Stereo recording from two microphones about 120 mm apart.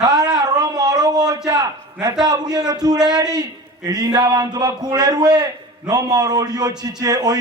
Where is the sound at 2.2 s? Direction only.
35° right (ahead or behind).